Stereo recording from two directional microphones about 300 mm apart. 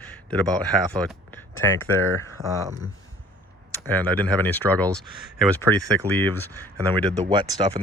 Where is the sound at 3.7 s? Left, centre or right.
Centre.